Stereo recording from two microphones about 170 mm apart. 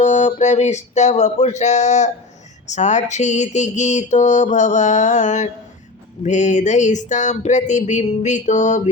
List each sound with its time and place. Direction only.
0.0 s mantra: 45° left (ahead or behind)